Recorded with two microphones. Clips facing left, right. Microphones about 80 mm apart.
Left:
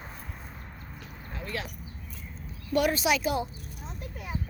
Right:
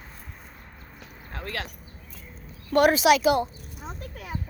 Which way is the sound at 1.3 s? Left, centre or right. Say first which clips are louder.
Right 2 dB; right.